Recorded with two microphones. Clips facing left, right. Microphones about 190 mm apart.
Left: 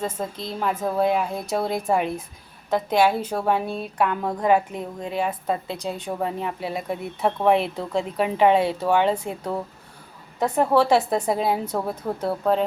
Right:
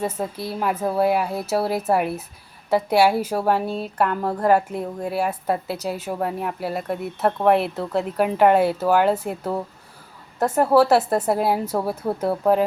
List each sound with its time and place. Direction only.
0.0 s a woman's voice: 10° right (ahead or behind)